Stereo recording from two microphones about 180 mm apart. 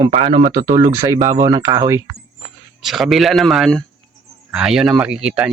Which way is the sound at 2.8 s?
Centre (ahead or behind).